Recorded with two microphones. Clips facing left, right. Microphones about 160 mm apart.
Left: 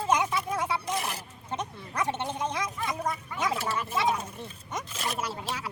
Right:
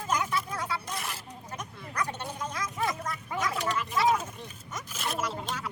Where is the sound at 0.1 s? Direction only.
25° left (ahead or behind).